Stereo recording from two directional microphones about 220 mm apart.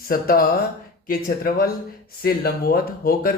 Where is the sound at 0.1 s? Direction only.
40° left (ahead or behind).